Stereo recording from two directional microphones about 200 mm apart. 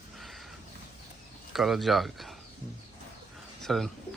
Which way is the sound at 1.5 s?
Centre (ahead or behind).